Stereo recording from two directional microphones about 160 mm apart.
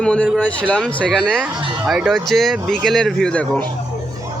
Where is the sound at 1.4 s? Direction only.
5° right (ahead or behind).